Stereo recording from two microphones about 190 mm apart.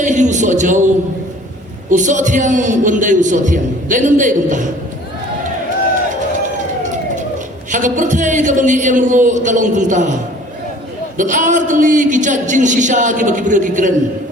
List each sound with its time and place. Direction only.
0.0 s a man's voice: 40° right (ahead or behind)
1.9 s a man's voice: 40° right (ahead or behind)
7.7 s a man's voice: 40° right (ahead or behind)
11.2 s a man's voice: 40° right (ahead or behind)